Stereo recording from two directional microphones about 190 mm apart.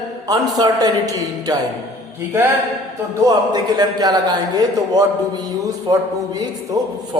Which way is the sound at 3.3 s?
20° right (ahead or behind).